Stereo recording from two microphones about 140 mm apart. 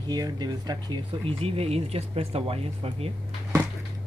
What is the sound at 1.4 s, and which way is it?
Speech, 45° right (ahead or behind).